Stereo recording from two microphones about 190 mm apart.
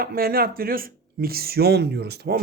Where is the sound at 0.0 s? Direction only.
50° right (ahead or behind).